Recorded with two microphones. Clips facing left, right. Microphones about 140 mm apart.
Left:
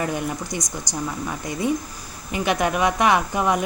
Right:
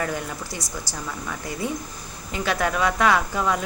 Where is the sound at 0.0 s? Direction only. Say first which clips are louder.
Left 3 dB; 20° left (ahead or behind).